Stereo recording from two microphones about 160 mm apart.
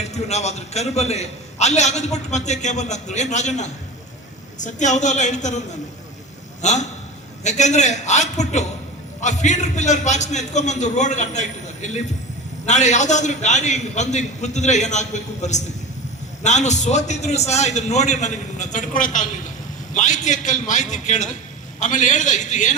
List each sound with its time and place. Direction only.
0.0 s a man's voice: 45° left (ahead or behind)
6.6 s a man's voice: 45° left (ahead or behind)